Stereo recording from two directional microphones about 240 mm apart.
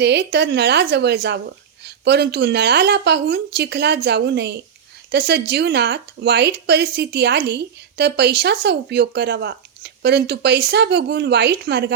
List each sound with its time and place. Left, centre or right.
0.0 s speech: right